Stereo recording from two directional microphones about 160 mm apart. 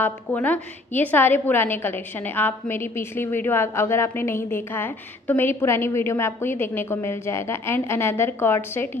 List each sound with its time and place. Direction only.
0.0 s a woman's voice: 10° left (ahead or behind)